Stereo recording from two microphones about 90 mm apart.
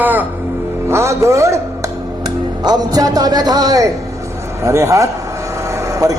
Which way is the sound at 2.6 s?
45° right (ahead or behind).